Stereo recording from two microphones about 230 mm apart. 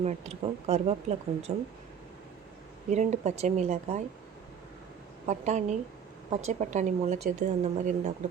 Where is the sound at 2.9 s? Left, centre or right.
Right.